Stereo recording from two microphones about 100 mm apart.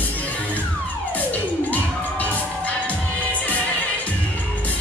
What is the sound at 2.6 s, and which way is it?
Music, 15° left (ahead or behind).